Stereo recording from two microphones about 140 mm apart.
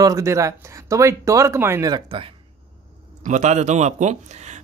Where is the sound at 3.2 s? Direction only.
60° right (ahead or behind).